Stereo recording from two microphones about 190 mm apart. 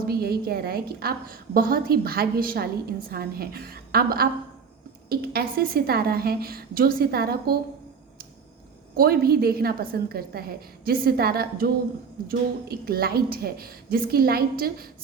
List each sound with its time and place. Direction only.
0.0 s a woman's voice: 55° right (ahead or behind)
9.0 s a woman's voice: 55° right (ahead or behind)